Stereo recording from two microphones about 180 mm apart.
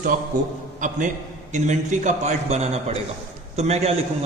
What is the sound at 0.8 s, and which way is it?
A man's voice, 45° right (ahead or behind).